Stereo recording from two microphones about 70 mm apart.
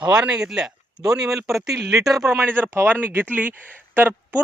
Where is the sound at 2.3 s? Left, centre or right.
Right.